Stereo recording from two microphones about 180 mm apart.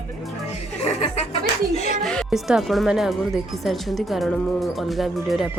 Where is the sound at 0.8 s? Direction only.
35° left (ahead or behind).